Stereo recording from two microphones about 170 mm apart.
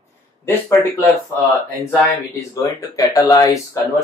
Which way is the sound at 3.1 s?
20° left (ahead or behind).